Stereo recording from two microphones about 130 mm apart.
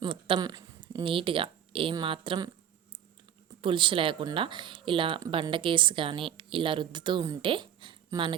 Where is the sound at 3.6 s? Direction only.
40° right (ahead or behind).